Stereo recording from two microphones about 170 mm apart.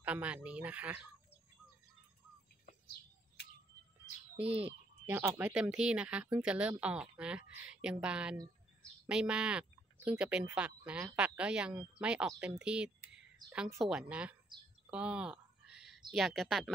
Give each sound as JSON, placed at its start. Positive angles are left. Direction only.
{"t": 0.0, "sound": "speech", "side_deg": -5}
{"t": 2.6, "sound": "bird", "side_deg": 65}
{"t": 4.4, "sound": "speech", "side_deg": -10}